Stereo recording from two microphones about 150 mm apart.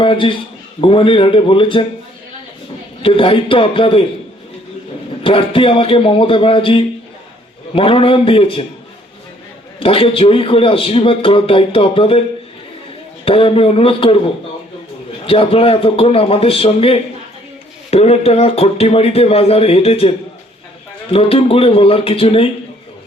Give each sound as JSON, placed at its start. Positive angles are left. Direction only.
{"t": 0.0, "sound": "a man's voice", "side_deg": 35}
{"t": 3.0, "sound": "a man's voice", "side_deg": 35}
{"t": 5.2, "sound": "a man's voice", "side_deg": 35}
{"t": 9.8, "sound": "a man's voice", "side_deg": 40}
{"t": 13.2, "sound": "a man's voice", "side_deg": 40}
{"t": 15.3, "sound": "a man's voice", "side_deg": 40}